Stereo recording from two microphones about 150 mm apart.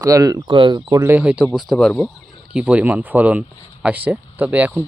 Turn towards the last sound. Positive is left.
turn(degrees=-10)  # may be behind; listen again after turning